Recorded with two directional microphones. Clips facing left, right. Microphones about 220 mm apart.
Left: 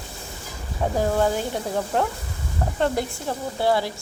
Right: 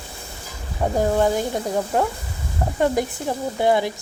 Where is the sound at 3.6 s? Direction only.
15° right (ahead or behind).